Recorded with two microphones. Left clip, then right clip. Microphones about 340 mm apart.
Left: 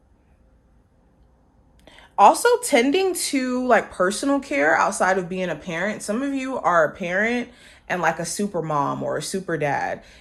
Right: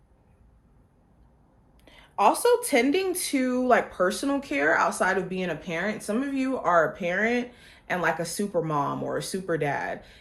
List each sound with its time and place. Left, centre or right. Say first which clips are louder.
1.8 s speech: left 8 dB; left